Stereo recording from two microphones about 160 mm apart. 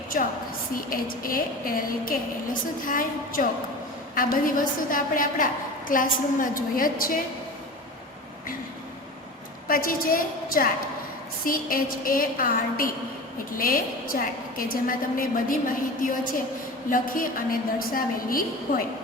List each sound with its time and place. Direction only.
0.8 s a woman's voice: 60° left (ahead or behind)
9.6 s a woman's voice: 65° left (ahead or behind)